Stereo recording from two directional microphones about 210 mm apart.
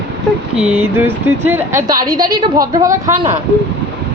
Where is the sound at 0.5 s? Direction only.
5° right (ahead or behind).